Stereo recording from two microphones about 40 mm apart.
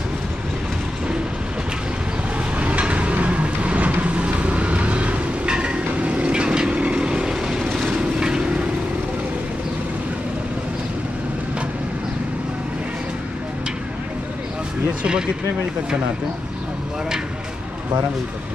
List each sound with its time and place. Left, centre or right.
2.6 s vehicle: right